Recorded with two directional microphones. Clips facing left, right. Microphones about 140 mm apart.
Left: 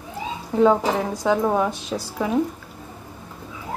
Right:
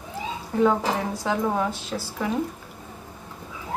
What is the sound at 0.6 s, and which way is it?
A woman's voice, 20° left (ahead or behind).